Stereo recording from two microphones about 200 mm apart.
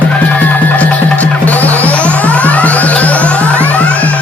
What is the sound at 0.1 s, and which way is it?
Music, 10° left (ahead or behind).